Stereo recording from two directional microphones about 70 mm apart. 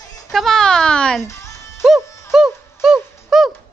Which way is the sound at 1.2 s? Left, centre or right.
Left.